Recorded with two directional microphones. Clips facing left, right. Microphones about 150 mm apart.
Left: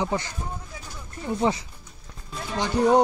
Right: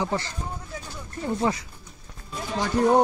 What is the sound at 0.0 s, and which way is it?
Speech, 15° left (ahead or behind).